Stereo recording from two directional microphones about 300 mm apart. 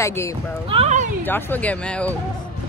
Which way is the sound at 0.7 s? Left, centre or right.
Right.